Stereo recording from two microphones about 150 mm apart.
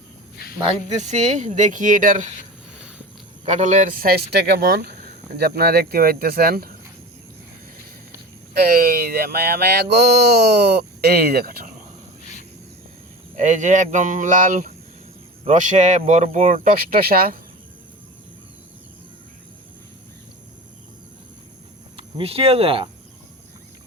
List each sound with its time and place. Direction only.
0.9 s speech: 50° right (ahead or behind)
3.4 s speech: 50° right (ahead or behind)
4.0 s a sound: 90° right
5.4 s speech: 90° right
8.5 s a sound: 85° right
13.3 s speech: 55° right (ahead or behind)
16.6 s speech: 80° right
21.9 s speech: 40° right (ahead or behind)